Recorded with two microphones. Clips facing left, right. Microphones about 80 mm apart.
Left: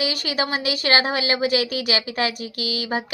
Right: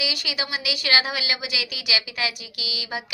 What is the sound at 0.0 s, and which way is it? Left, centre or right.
A woman's voice, left.